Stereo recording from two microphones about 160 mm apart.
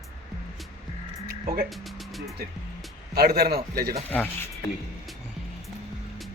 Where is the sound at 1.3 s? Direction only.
70° right (ahead or behind).